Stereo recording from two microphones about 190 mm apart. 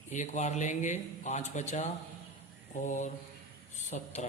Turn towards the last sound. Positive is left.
turn(degrees=40)  # may be behind; listen again after turning